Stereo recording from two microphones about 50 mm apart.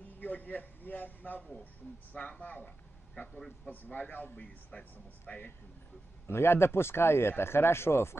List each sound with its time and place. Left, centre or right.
0.2 s a man's voice: left
2.1 s a man's voice: left
6.2 s speech: left